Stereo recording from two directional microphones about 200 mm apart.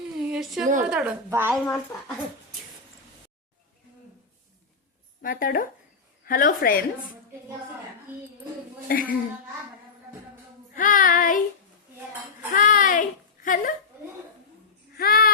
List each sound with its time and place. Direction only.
0.3 s a sound: centre (ahead or behind)
0.8 s speech: 5° right (ahead or behind)
1.5 s speech: centre (ahead or behind)
5.2 s child singing: 45° left (ahead or behind)
8.9 s child singing: 45° left (ahead or behind)
10.8 s child singing: 45° left (ahead or behind)
12.5 s a child's voice: 45° left (ahead or behind)
14.9 s a sound: 50° left (ahead or behind)